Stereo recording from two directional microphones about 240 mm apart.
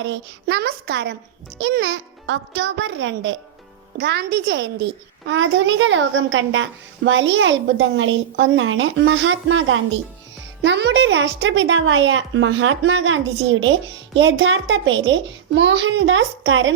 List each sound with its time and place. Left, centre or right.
0.0 s a child's voice: right